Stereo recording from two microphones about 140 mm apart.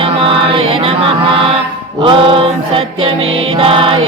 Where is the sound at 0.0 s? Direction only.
40° right (ahead or behind).